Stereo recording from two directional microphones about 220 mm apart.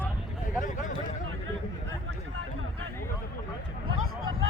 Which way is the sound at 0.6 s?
35° left (ahead or behind).